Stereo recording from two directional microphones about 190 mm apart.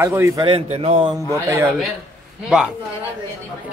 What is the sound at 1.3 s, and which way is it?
Speech, 15° right (ahead or behind).